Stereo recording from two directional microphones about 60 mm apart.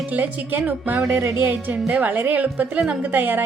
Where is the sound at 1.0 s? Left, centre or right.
Right.